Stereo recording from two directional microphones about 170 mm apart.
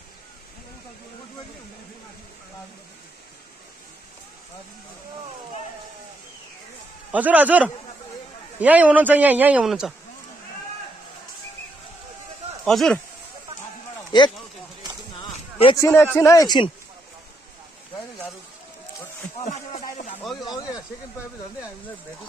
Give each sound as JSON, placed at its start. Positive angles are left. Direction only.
{"t": 7.1, "sound": "a man's voice", "side_deg": -10}
{"t": 12.6, "sound": "speech", "side_deg": 0}
{"t": 14.1, "sound": "speech", "side_deg": 25}
{"t": 19.5, "sound": "a sound", "side_deg": 45}
{"t": 20.2, "sound": "speech", "side_deg": 0}
{"t": 20.4, "sound": "speech", "side_deg": 20}